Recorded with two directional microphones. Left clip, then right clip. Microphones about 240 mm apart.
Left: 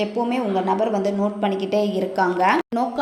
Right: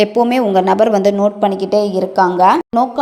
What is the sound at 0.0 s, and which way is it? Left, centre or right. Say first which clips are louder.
A woman's voice: right 10 dB; right.